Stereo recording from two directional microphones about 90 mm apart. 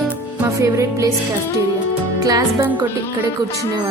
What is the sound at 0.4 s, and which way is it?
Music, 35° right (ahead or behind).